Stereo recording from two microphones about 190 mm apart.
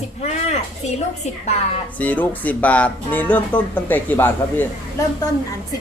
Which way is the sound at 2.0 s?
10° left (ahead or behind).